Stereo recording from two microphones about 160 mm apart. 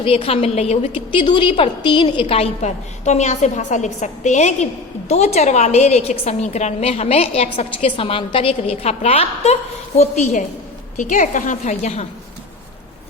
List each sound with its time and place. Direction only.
0.0 s a woman's voice: 35° left (ahead or behind)